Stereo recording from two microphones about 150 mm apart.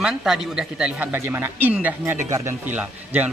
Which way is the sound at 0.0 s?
5° right (ahead or behind).